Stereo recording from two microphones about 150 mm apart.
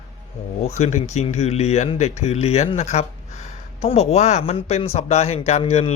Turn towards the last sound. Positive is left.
turn(degrees=45)  # may be behind; listen again after turning